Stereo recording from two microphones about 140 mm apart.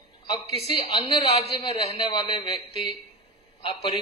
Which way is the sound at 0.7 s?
40° left (ahead or behind).